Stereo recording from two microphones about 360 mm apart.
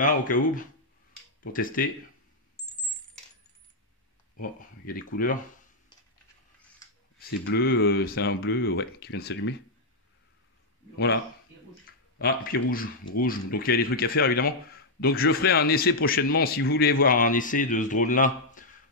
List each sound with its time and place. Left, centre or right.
0.0 s a man's voice: left
4.4 s a man's voice: left
7.2 s a man's voice: left
12.2 s a man's voice: left